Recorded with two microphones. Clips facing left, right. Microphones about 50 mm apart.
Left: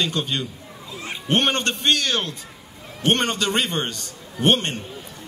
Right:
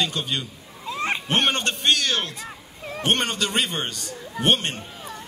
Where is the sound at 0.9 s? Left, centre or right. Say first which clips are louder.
Right 8 dB; right.